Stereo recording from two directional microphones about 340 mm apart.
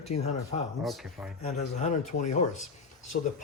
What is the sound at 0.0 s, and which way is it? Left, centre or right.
Speech, centre.